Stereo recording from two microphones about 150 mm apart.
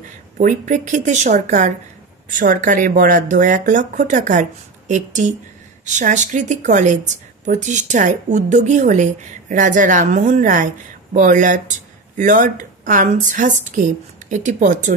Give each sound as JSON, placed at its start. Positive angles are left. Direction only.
{"t": 0.4, "sound": "speech", "side_deg": -55}